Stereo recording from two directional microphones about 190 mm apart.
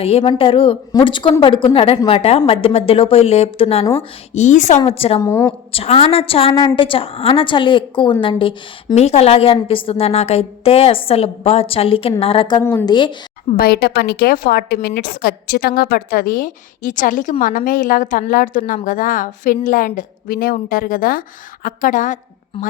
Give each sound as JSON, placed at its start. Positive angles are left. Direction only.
{"t": 0.0, "sound": "a woman's voice", "side_deg": 30}
{"t": 5.2, "sound": "a woman's voice", "side_deg": 15}
{"t": 5.7, "sound": "a woman's voice", "side_deg": 30}
{"t": 12.6, "sound": "a woman's voice", "side_deg": 15}
{"t": 12.9, "sound": "a woman's voice", "side_deg": 25}
{"t": 13.6, "sound": "a woman's voice", "side_deg": 55}